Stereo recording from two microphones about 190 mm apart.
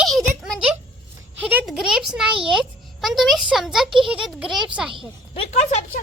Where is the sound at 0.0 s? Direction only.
Centre (ahead or behind).